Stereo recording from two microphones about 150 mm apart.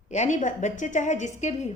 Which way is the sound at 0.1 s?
55° left (ahead or behind).